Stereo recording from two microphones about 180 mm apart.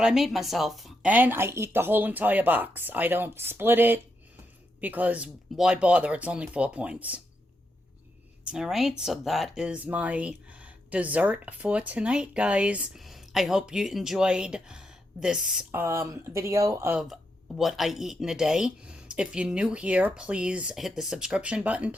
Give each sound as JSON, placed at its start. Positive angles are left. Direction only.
{"t": 0.0, "sound": "a woman's voice", "side_deg": 0}
{"t": 8.4, "sound": "speech", "side_deg": -5}
{"t": 15.8, "sound": "a woman's voice", "side_deg": -15}
{"t": 17.6, "sound": "speech", "side_deg": 0}